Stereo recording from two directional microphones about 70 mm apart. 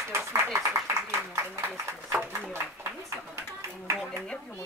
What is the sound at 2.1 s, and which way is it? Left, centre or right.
Speech, right.